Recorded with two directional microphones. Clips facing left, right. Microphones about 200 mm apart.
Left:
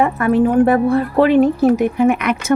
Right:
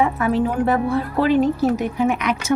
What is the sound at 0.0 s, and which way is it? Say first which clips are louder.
A woman's voice: left 5 dB; 55° left (ahead or behind).